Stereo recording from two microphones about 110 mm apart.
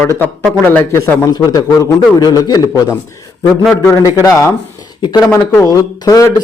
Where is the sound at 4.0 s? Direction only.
30° left (ahead or behind).